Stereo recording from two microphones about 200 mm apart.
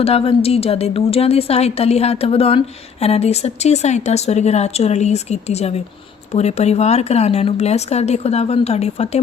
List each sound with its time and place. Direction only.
0.0 s a woman's voice: 30° left (ahead or behind)